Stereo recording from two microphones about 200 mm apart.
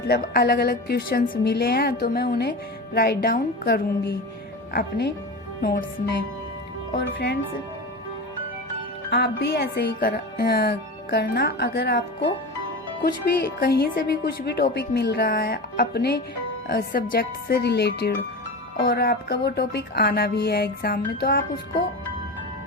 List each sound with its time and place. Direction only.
0.1 s a woman's voice: 50° left (ahead or behind)
7.1 s a woman's voice: 55° left (ahead or behind)
9.0 s a woman's voice: 50° left (ahead or behind)